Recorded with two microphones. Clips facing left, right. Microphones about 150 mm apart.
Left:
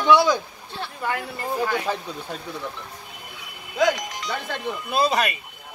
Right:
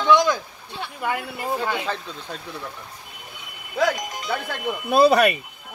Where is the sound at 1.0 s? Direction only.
5° right (ahead or behind).